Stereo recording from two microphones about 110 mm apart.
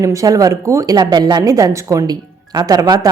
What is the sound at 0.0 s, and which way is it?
A woman's voice, 30° right (ahead or behind).